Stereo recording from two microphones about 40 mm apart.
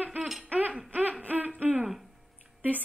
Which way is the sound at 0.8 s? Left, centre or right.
Right.